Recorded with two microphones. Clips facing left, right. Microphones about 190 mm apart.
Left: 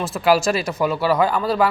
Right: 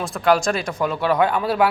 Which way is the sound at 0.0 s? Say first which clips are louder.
Left 1 dB; 5° left (ahead or behind).